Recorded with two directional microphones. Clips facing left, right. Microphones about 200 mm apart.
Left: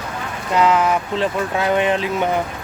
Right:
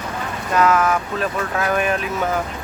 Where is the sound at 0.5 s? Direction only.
25° left (ahead or behind).